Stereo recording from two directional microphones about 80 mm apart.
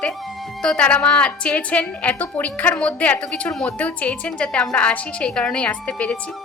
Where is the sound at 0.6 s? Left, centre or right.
Centre.